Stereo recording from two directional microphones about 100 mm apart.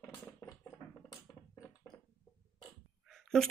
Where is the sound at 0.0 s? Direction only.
25° left (ahead or behind).